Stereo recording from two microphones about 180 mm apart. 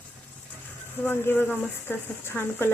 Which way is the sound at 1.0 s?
10° left (ahead or behind).